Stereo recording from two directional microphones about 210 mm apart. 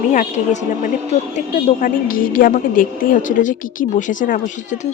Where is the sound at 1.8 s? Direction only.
40° left (ahead or behind).